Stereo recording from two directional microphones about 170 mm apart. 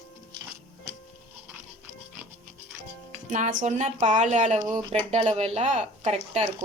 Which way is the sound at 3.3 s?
45° right (ahead or behind).